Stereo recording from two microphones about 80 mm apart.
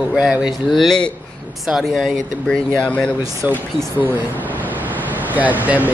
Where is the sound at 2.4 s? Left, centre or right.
Centre.